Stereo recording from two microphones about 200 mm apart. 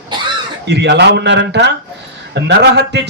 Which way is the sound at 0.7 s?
60° right (ahead or behind).